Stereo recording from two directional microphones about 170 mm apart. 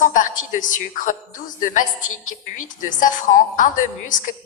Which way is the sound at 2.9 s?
50° left (ahead or behind).